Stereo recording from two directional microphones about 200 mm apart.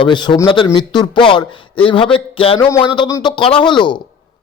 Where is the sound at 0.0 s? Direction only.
25° left (ahead or behind).